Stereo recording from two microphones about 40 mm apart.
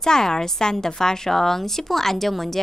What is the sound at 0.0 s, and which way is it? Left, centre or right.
A woman's voice, centre.